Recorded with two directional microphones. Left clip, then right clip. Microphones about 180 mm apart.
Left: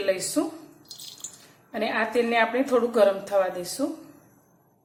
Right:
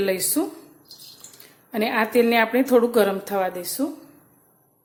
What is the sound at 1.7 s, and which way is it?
A woman's voice, 45° right (ahead or behind).